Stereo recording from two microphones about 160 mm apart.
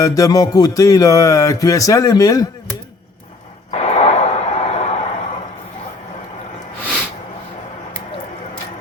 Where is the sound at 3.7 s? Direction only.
45° left (ahead or behind).